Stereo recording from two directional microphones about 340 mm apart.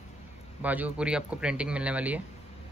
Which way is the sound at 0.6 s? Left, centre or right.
Centre.